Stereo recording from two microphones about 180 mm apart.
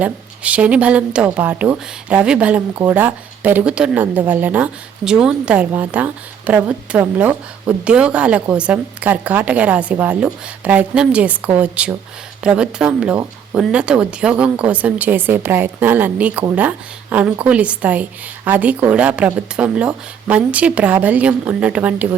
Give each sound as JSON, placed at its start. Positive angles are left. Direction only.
{"t": 0.0, "sound": "speech", "side_deg": -5}